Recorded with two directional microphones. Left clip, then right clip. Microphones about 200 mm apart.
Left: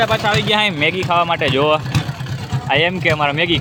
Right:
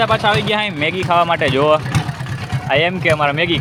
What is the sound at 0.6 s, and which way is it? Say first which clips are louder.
Speech: left 3 dB; 15° left (ahead or behind).